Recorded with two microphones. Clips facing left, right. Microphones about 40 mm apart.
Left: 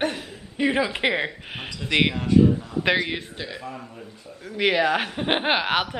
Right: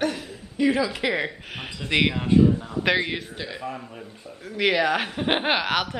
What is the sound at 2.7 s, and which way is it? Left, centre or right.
Speech, centre.